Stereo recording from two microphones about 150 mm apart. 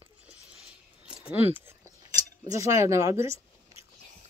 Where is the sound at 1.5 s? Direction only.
15° right (ahead or behind).